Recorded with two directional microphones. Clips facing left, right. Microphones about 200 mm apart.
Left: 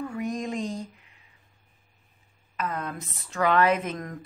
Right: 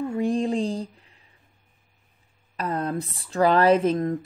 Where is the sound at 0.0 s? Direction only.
30° right (ahead or behind).